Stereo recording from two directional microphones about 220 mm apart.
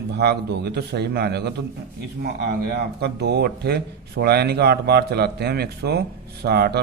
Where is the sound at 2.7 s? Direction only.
50° right (ahead or behind).